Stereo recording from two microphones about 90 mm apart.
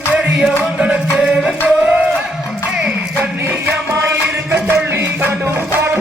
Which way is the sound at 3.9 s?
30° right (ahead or behind).